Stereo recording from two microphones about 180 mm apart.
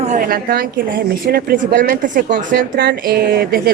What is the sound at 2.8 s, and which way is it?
Speech, 60° right (ahead or behind).